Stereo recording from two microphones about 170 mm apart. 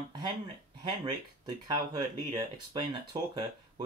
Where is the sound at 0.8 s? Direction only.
25° right (ahead or behind).